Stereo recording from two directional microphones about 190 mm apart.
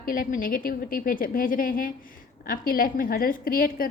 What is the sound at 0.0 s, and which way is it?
A woman's voice, 45° left (ahead or behind).